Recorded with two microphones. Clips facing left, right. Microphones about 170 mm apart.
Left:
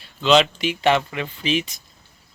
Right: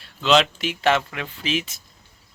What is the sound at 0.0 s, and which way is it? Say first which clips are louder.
Speech: left 2 dB; centre (ahead or behind).